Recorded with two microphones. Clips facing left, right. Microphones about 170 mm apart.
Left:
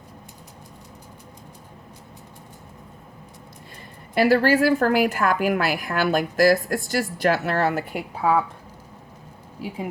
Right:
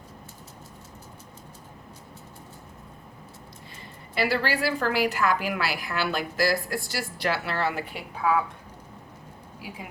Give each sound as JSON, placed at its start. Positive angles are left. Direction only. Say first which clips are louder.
{"t": 4.1, "sound": "a woman's voice", "louder": "left 8 dB", "side_deg": 45}